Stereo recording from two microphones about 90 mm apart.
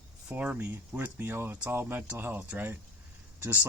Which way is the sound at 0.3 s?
15° right (ahead or behind).